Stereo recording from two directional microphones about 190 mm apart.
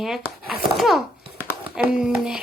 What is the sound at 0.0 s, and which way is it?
A child's voice, centre (ahead or behind).